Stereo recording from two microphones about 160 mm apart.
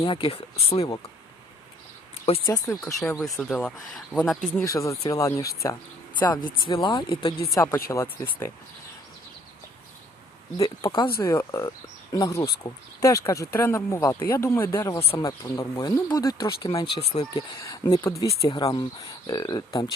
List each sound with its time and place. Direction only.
0.0 s speech: 35° left (ahead or behind)
2.5 s speech: 20° left (ahead or behind)
3.5 s speech: centre (ahead or behind)
4.6 s speech: 20° left (ahead or behind)
7.5 s speech: 20° left (ahead or behind)
10.8 s speech: 30° left (ahead or behind)
11.2 s speech: 20° left (ahead or behind)
15.0 s speech: 35° left (ahead or behind)
15.3 s speech: 20° left (ahead or behind); by 17.2 s 40° left (ahead or behind)
17.3 s speech: 20° left (ahead or behind)